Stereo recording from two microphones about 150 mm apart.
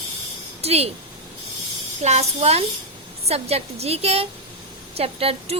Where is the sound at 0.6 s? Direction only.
45° right (ahead or behind).